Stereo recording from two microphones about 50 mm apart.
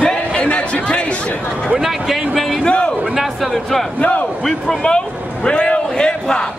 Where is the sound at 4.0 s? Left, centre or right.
Left.